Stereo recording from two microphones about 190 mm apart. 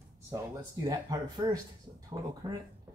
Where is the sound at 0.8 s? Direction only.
20° right (ahead or behind).